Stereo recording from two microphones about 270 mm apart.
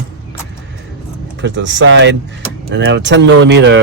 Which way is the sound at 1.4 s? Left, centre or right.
Right.